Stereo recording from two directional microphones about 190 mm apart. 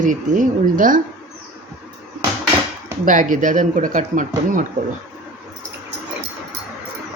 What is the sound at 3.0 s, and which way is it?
Speech, 45° right (ahead or behind).